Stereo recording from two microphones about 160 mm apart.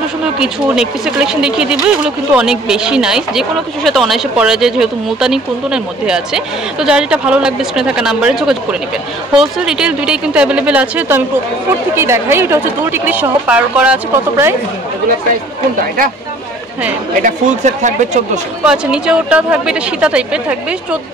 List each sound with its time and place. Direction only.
0.4 s a woman's voice: 5° right (ahead or behind)
17.2 s speech: 50° right (ahead or behind)
18.7 s a woman's voice: 5° right (ahead or behind)